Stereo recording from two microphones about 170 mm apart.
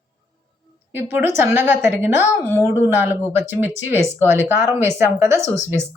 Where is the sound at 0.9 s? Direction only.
15° right (ahead or behind).